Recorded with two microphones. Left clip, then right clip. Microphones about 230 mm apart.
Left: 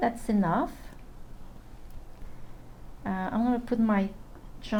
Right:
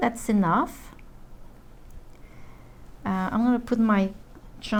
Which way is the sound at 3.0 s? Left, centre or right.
Right.